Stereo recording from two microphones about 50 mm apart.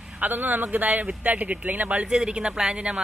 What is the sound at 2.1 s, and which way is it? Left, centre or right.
Speech, centre.